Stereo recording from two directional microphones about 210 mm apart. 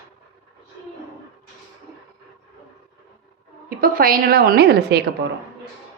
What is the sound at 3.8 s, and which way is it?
A woman's voice, 45° right (ahead or behind).